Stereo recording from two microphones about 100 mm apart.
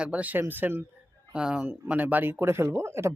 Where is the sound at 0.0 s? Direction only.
15° right (ahead or behind).